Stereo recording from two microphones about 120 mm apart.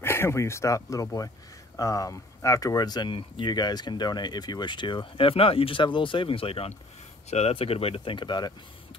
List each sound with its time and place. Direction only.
0.0 s speech: 20° left (ahead or behind); by 6.7 s 50° left (ahead or behind)
7.2 s speech: 65° left (ahead or behind); by 8.5 s 35° left (ahead or behind)